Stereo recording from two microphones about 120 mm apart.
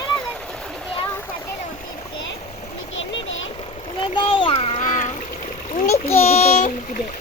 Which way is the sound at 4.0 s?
45° left (ahead or behind).